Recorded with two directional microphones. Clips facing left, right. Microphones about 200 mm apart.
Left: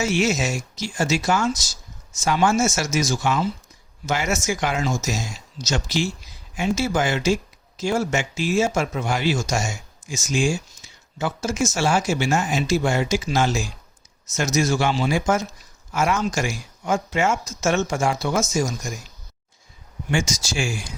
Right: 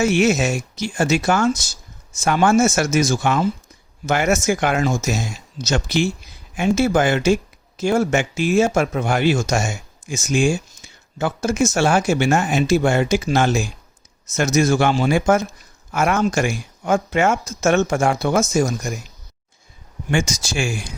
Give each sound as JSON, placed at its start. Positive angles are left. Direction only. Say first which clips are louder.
{"t": 0.0, "sound": "speech", "louder": "right 5 dB", "side_deg": -55}
{"t": 20.1, "sound": "speech", "louder": "right 3 dB", "side_deg": -60}